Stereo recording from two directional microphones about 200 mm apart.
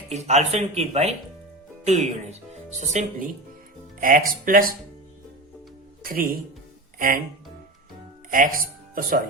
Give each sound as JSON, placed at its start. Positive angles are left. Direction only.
{"t": 0.1, "sound": "speech", "side_deg": -35}
{"t": 6.0, "sound": "speech", "side_deg": -45}
{"t": 8.3, "sound": "speech", "side_deg": -45}